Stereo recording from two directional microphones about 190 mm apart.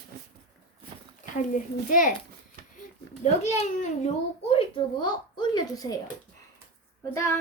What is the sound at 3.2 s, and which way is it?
Speech, 35° left (ahead or behind).